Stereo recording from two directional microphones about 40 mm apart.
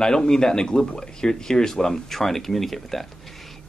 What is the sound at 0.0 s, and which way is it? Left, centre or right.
Speech, centre.